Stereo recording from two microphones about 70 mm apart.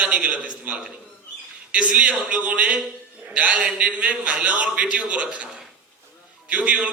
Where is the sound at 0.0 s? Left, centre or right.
Centre.